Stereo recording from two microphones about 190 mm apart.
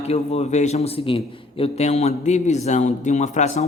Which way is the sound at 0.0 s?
35° left (ahead or behind).